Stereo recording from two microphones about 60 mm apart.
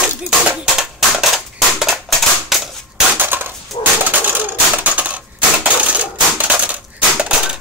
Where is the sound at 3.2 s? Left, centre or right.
Right.